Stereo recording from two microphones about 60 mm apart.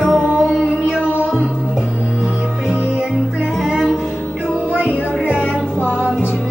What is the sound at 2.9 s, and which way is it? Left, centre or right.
Music, centre.